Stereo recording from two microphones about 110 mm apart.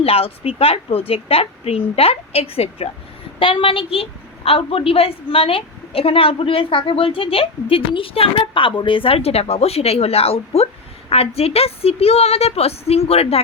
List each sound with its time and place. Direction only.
0.0 s a woman's voice: 60° left (ahead or behind)
3.4 s a woman's voice: 55° left (ahead or behind)